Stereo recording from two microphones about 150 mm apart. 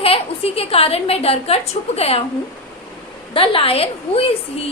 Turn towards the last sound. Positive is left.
turn(degrees=40)  # may be behind; listen again after turning